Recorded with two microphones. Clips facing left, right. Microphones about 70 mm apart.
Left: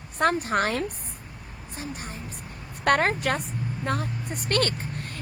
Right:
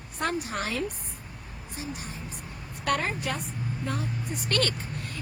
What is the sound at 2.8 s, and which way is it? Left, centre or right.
Speech, left.